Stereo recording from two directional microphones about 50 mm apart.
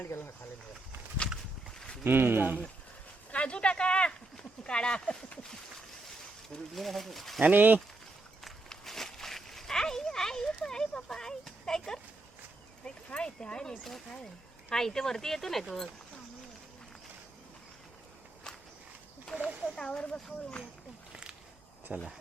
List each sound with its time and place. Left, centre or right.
0.0 s speech: left
2.0 s speech: right
3.3 s speech: left
6.7 s speech: centre
7.4 s speech: right
8.7 s a sound: centre
12.8 s speech: centre
13.8 s speech: centre
19.3 s speech: left
19.7 s speech: centre
21.1 s walk: centre
21.9 s speech: centre